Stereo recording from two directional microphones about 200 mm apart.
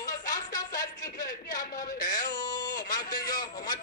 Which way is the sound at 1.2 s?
40° left (ahead or behind).